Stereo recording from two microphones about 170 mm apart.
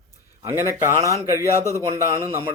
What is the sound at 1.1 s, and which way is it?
Speech, 15° left (ahead or behind).